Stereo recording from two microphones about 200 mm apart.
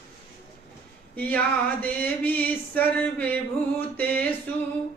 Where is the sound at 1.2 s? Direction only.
10° left (ahead or behind).